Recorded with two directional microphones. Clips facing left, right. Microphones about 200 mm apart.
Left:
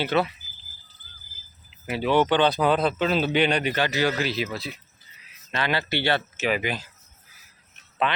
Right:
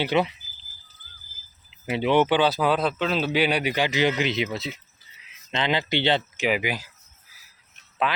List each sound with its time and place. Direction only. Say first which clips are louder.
0.0 s speech: right 1 dB; 15° right (ahead or behind)
1.9 s speech: right 1 dB; 20° right (ahead or behind)
8.1 s speech: even; 5° right (ahead or behind)